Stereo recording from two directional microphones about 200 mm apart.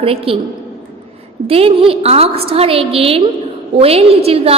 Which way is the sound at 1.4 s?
30° right (ahead or behind).